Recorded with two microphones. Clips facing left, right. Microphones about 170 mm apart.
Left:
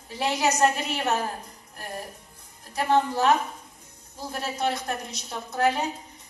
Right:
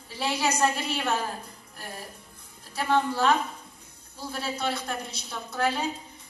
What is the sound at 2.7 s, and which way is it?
A woman's voice, 20° left (ahead or behind).